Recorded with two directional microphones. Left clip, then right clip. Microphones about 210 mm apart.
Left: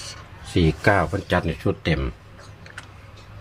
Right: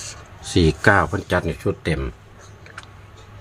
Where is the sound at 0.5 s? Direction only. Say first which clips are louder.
Right 3 dB; 25° right (ahead or behind).